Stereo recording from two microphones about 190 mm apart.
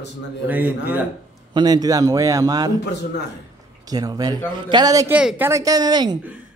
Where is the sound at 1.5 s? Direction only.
20° right (ahead or behind).